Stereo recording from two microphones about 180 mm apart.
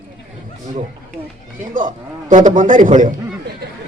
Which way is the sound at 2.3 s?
45° right (ahead or behind).